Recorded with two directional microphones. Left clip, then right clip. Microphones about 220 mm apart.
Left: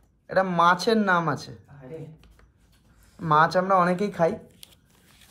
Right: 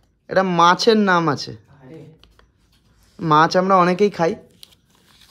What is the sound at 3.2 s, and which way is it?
Speech, 55° right (ahead or behind).